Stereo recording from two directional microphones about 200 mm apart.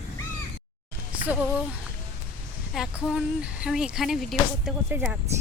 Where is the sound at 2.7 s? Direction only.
5° right (ahead or behind).